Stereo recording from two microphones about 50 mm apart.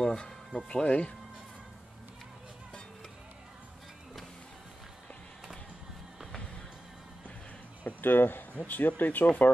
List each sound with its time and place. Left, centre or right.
0.0 s speech: centre
7.8 s a sound: left
8.6 s speech: left